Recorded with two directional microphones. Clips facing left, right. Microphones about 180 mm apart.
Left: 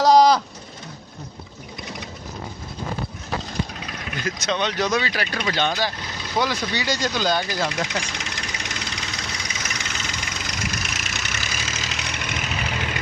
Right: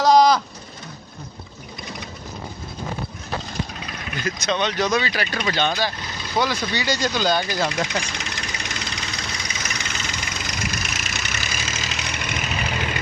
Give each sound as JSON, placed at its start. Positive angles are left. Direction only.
{"t": 0.0, "sound": "a sound", "side_deg": 35}
{"t": 4.4, "sound": "speech", "side_deg": 5}
{"t": 6.8, "sound": "speech", "side_deg": -5}
{"t": 7.5, "sound": "speech", "side_deg": -20}
{"t": 8.1, "sound": "engine knocking", "side_deg": 15}
{"t": 9.6, "sound": "vehicle", "side_deg": 0}